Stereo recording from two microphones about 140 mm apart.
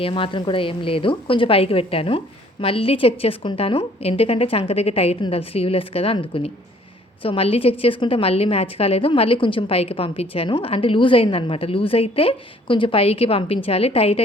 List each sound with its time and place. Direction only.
0.0 s a woman's voice: 40° left (ahead or behind)